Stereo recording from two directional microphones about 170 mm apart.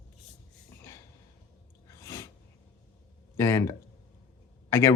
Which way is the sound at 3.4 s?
15° left (ahead or behind).